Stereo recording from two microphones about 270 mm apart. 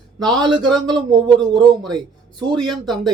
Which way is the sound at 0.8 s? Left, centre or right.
Centre.